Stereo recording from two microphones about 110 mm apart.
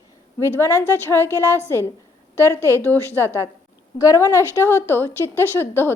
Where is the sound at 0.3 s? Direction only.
25° left (ahead or behind).